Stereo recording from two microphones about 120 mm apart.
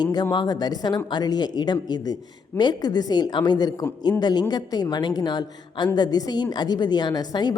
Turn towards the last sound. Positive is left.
turn(degrees=35)  # may be behind; listen again after turning